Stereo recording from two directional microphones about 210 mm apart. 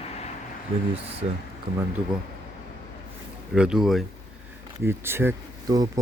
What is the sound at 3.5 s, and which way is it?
Speech, 5° right (ahead or behind).